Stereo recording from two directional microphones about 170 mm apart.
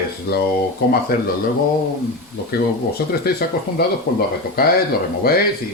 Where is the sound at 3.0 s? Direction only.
70° left (ahead or behind).